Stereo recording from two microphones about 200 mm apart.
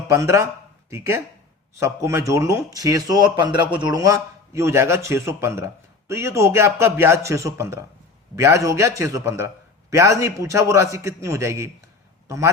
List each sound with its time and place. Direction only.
0.1 s a man's voice: 15° right (ahead or behind)